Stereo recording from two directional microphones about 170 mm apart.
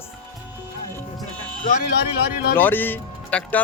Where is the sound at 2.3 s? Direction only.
60° left (ahead or behind).